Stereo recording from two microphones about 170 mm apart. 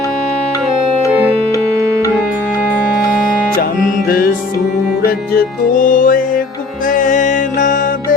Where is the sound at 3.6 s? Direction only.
60° left (ahead or behind).